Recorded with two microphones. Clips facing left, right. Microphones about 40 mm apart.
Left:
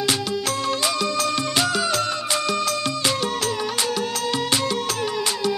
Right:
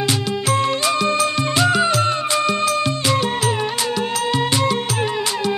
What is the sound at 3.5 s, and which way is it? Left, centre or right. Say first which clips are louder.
Music: right 3 dB; right.